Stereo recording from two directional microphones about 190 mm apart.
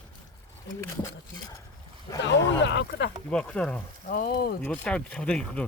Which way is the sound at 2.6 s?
65° left (ahead or behind).